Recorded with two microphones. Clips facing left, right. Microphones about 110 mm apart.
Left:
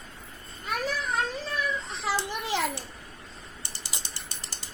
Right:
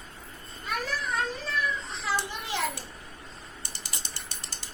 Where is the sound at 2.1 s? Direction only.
20° left (ahead or behind).